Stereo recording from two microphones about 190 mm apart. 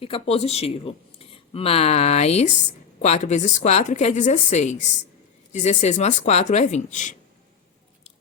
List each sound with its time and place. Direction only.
0.0 s speech: 30° left (ahead or behind)